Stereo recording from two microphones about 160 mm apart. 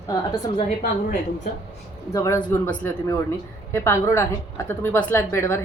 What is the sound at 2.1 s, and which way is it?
A woman's voice, 20° left (ahead or behind).